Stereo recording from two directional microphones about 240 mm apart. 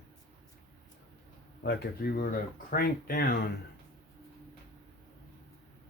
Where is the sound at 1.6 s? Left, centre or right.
Left.